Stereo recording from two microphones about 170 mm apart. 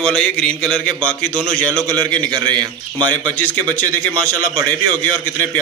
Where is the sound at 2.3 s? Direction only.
25° right (ahead or behind).